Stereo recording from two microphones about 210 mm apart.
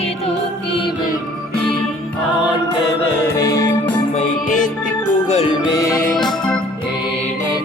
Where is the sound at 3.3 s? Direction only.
15° left (ahead or behind).